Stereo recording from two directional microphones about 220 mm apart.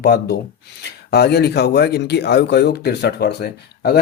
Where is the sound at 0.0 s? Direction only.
45° left (ahead or behind).